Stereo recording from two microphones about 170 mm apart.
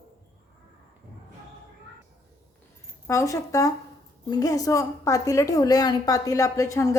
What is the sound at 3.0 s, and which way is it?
A woman's voice, 15° left (ahead or behind).